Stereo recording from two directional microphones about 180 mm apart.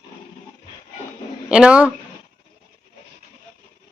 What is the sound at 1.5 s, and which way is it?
Speech, 5° right (ahead or behind).